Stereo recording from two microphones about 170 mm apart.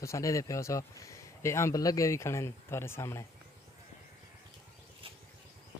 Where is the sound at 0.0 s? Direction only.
20° left (ahead or behind).